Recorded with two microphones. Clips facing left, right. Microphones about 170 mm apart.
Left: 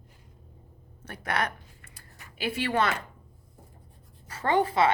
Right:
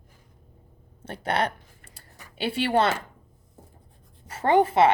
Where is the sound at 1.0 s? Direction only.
30° right (ahead or behind).